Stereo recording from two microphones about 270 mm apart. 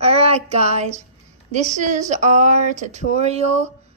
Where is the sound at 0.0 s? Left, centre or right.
Right.